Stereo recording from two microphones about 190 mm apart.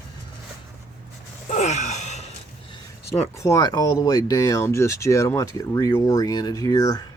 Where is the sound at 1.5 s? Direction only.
40° left (ahead or behind).